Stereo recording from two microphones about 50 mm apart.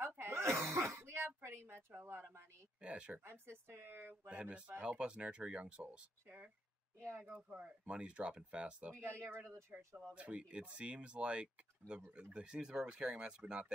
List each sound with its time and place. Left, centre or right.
0.0 s cough: right
0.9 s speech: right
1.6 s speech: right
2.8 s speech: right
3.3 s speech: right
4.3 s speech: right
7.0 s speech: right
7.4 s speech: right
8.9 s speech: right
10.1 s speech: right